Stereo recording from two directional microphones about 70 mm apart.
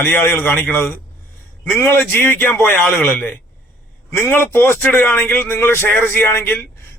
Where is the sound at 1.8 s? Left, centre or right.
Left.